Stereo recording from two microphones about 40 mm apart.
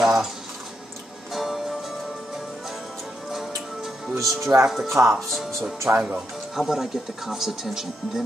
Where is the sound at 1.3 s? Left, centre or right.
Centre.